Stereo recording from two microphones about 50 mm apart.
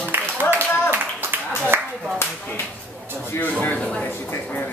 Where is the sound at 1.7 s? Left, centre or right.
Right.